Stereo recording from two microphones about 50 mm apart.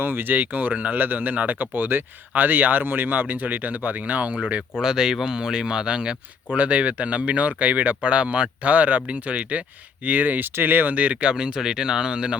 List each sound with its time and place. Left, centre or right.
0.0 s speech: right
4.8 s speech: centre
6.5 s speech: right
10.9 s speech: right